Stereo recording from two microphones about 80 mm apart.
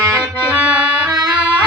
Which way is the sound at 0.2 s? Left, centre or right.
Centre.